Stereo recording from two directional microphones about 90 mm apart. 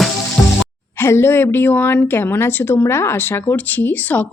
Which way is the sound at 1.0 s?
30° left (ahead or behind).